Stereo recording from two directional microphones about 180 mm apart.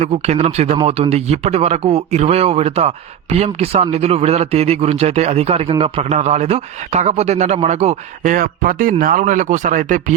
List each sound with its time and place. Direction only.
0.0 s speech: 35° right (ahead or behind)